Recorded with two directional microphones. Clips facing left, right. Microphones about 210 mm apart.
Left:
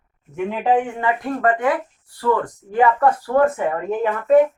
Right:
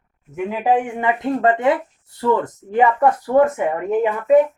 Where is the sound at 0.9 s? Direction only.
20° right (ahead or behind).